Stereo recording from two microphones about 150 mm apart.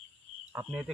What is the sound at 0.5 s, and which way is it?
Speech, 10° right (ahead or behind).